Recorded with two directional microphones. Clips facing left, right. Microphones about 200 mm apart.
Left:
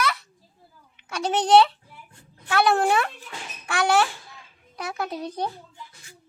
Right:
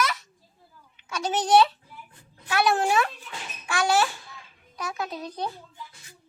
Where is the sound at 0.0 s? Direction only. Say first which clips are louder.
Left 1 dB; 60° left (ahead or behind).